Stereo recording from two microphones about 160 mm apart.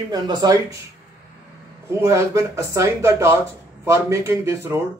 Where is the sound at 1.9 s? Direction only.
15° right (ahead or behind).